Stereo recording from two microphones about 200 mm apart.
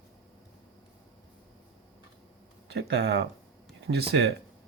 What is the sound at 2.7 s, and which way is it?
Speech, 55° right (ahead or behind).